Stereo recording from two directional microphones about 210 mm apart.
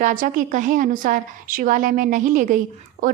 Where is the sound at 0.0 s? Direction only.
40° right (ahead or behind).